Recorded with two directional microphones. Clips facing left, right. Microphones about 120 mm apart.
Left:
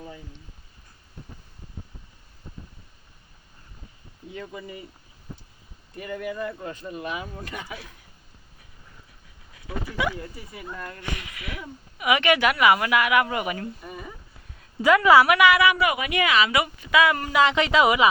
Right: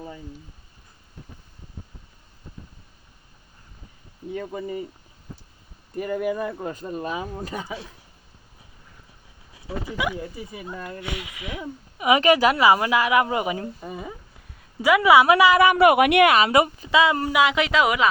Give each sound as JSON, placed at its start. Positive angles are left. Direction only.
{"t": 4.3, "sound": "speech", "side_deg": -45}
{"t": 6.0, "sound": "speech", "side_deg": -45}
{"t": 9.6, "sound": "a sound", "side_deg": -25}
{"t": 10.0, "sound": "speech", "side_deg": -15}
{"t": 11.9, "sound": "a woman's voice", "side_deg": -30}
{"t": 14.8, "sound": "speech", "side_deg": -10}
{"t": 15.2, "sound": "speech", "side_deg": -30}
{"t": 15.6, "sound": "speech", "side_deg": -50}
{"t": 16.4, "sound": "speech", "side_deg": -40}
{"t": 16.9, "sound": "a woman's voice", "side_deg": -25}
{"t": 17.2, "sound": "a woman's voice", "side_deg": -10}